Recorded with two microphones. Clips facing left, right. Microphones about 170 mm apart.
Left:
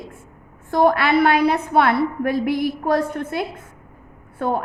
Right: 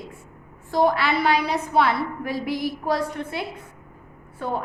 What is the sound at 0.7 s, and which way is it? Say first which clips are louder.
A woman's voice: left 4 dB; 55° left (ahead or behind).